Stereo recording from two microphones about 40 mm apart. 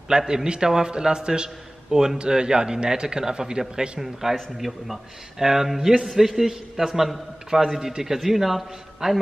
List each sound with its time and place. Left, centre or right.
0.3 s a man's voice: centre
4.0 s a man's voice: centre